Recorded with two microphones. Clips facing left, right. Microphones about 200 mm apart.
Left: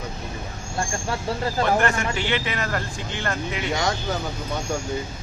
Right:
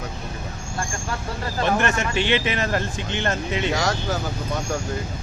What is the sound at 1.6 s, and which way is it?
Speech, 20° right (ahead or behind).